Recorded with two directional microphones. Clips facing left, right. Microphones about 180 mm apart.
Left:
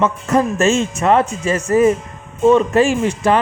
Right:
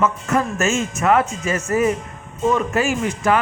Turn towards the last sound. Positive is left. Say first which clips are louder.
# left 3 dB
turn(degrees=30)  # may be behind; listen again after turning